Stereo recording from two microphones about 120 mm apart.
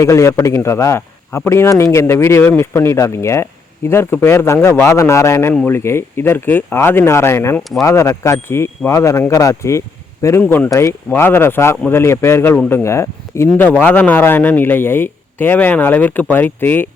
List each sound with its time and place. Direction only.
0.0 s speech: 25° left (ahead or behind)
10.4 s speech: 15° left (ahead or behind)
10.7 s speech: 25° left (ahead or behind)